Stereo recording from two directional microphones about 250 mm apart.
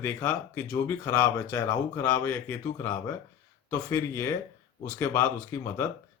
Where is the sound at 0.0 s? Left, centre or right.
Centre.